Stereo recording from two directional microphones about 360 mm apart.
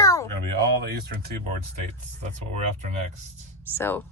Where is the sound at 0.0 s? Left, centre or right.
Centre.